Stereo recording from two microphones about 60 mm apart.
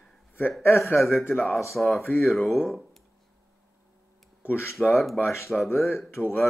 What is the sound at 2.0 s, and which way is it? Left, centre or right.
Speech, left.